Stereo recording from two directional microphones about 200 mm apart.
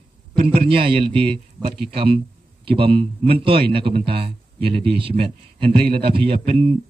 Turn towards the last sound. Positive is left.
turn(degrees=-30)  # may be behind; listen again after turning